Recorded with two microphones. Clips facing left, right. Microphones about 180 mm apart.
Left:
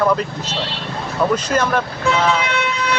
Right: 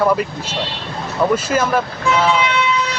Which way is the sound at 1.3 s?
5° right (ahead or behind).